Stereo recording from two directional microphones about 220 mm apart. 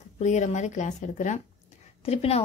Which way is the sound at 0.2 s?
30° left (ahead or behind).